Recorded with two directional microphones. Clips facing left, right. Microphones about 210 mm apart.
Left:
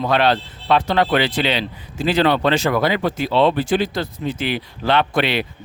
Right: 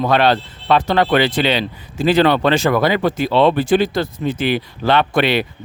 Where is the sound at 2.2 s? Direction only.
55° right (ahead or behind).